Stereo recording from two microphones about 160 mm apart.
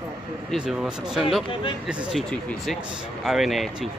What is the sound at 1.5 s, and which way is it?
Speech, 30° left (ahead or behind).